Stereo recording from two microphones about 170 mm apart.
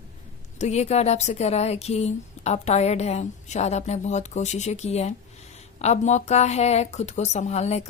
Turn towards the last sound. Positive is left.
turn(degrees=40)  # may be behind; listen again after turning